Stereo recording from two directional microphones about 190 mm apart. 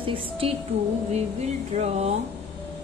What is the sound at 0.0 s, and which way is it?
A woman's voice, 30° right (ahead or behind).